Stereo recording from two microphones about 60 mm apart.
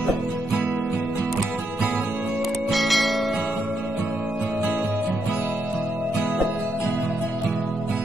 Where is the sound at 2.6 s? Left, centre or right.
Centre.